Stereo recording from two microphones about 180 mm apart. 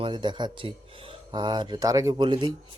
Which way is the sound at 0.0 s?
25° right (ahead or behind).